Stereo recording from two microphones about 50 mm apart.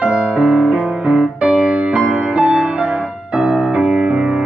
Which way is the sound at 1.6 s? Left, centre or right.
Right.